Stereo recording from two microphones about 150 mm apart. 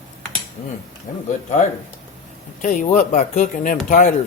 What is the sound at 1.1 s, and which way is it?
Speech, 70° left (ahead or behind).